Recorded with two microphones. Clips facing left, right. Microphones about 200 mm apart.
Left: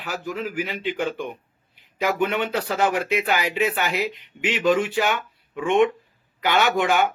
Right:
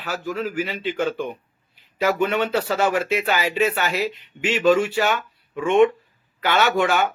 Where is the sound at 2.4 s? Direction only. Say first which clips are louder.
Right 2 dB; 15° left (ahead or behind).